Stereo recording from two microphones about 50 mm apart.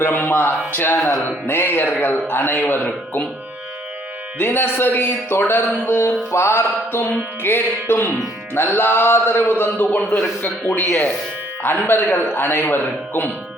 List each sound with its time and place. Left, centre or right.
0.0 s a man's voice: left
4.4 s a man's voice: left
11.6 s a man's voice: left